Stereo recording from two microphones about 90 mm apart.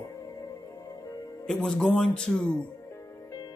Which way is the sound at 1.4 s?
10° left (ahead or behind).